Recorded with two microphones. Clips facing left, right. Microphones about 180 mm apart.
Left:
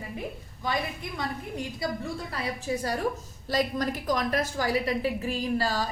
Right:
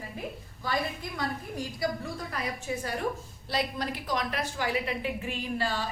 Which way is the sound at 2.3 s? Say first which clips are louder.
Left 3 dB; 30° left (ahead or behind).